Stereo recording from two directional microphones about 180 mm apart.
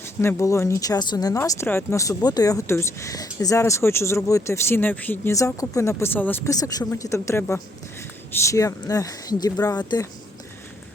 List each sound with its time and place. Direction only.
0.0 s speech: 15° left (ahead or behind)